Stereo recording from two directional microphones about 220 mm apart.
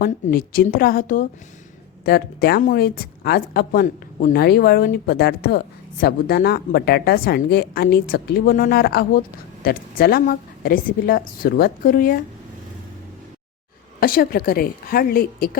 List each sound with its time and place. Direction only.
0.0 s a woman's voice: 40° left (ahead or behind)
14.0 s a woman's voice: 40° left (ahead or behind)